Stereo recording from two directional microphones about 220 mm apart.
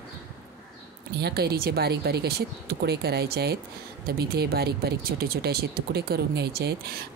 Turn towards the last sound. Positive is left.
turn(degrees=-45)  # may be behind; listen again after turning